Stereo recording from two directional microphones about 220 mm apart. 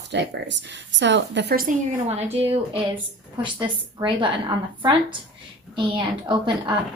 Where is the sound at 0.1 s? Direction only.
50° right (ahead or behind); by 3.0 s 25° right (ahead or behind).